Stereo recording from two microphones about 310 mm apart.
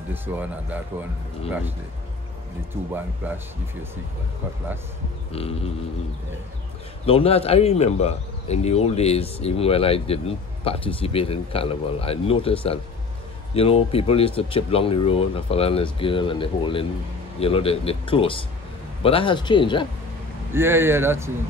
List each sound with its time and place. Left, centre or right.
0.1 s speech: centre
3.2 s speech: centre
5.3 s speech: centre
7.1 s speech: centre
20.5 s speech: centre